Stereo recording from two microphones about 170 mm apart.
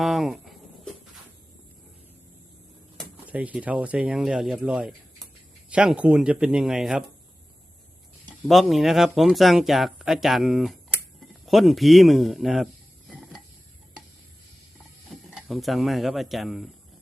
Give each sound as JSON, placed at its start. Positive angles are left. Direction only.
{"t": 0.0, "sound": "a sound", "side_deg": 0}
{"t": 3.2, "sound": "speech", "side_deg": -10}
{"t": 8.4, "sound": "speech", "side_deg": 0}
{"t": 13.1, "sound": "stir", "side_deg": 0}
{"t": 15.1, "sound": "speech", "side_deg": 0}